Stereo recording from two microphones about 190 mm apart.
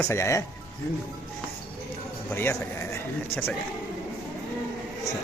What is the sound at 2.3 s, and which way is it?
Speech, 10° left (ahead or behind).